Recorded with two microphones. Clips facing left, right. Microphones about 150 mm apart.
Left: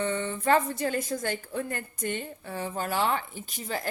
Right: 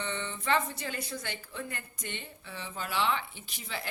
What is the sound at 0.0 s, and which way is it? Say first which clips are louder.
Speech: left 8 dB; 45° left (ahead or behind).